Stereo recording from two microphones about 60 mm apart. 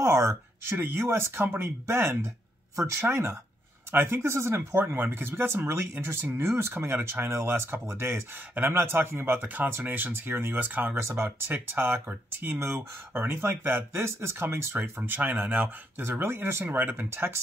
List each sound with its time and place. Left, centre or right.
0.0 s a sound: right
1.1 s speech: right
9.4 s speech: right
11.0 s speech: right
11.2 s speech: right
14.8 s speech: right
16.0 s speech: right